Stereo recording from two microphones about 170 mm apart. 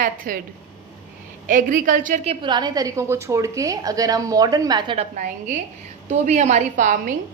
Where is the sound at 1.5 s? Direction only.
50° right (ahead or behind).